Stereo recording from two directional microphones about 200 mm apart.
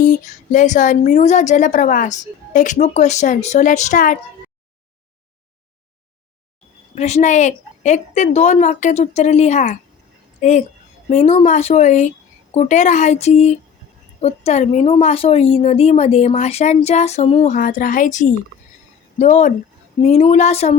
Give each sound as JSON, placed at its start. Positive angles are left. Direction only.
{"t": 0.0, "sound": "speech", "side_deg": 40}
{"t": 6.9, "sound": "speech", "side_deg": 35}
{"t": 11.1, "sound": "speech", "side_deg": 30}